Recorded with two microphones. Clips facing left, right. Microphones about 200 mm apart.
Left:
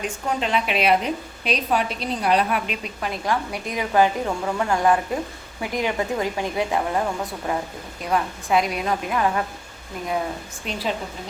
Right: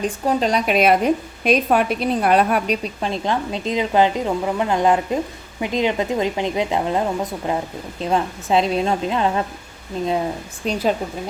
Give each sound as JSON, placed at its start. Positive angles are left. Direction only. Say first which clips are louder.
{"t": 0.0, "sound": "a woman's voice", "louder": "right 6 dB", "side_deg": -35}
{"t": 10.6, "sound": "a woman's voice", "louder": "right 8 dB", "side_deg": -40}